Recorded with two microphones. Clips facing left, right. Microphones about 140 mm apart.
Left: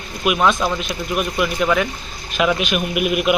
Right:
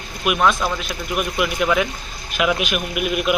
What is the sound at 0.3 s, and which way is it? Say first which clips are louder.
A man's voice: left 1 dB; centre (ahead or behind).